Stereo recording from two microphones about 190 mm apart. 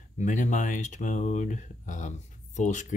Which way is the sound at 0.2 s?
40° left (ahead or behind).